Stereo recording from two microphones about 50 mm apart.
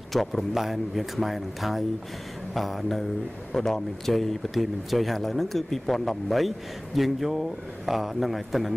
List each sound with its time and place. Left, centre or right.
0.1 s speech: centre